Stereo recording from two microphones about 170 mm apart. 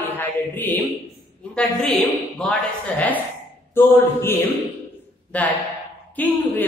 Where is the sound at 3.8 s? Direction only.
15° left (ahead or behind).